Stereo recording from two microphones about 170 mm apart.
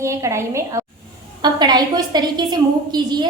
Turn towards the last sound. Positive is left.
turn(degrees=-25)  # may be behind; listen again after turning